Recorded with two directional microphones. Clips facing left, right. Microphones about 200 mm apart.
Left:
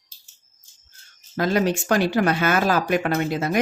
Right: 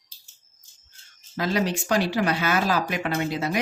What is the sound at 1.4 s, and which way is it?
Speech, 50° left (ahead or behind).